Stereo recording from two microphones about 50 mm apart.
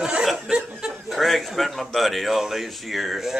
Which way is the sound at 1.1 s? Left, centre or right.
Centre.